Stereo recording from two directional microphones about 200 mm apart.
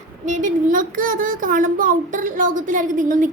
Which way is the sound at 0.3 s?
40° right (ahead or behind).